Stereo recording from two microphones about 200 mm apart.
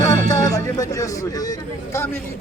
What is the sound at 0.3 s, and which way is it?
Speech, 15° left (ahead or behind).